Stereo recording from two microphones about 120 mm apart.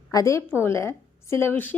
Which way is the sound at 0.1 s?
30° left (ahead or behind).